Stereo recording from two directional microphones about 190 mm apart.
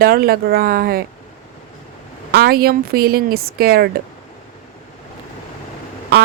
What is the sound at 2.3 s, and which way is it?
Speech, 50° right (ahead or behind).